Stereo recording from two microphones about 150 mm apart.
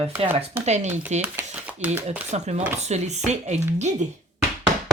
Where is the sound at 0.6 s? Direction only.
50° right (ahead or behind).